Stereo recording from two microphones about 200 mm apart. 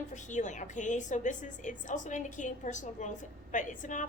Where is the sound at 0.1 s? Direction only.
40° left (ahead or behind).